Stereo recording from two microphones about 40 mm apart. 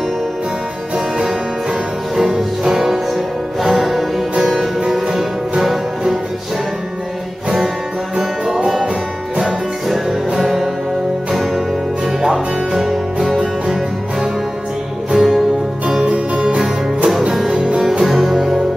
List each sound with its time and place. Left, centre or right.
0.9 s music: centre
9.4 s music: centre
12.2 s music: centre
15.1 s music: centre
16.0 s music: right
17.6 s music: right
18.0 s music: centre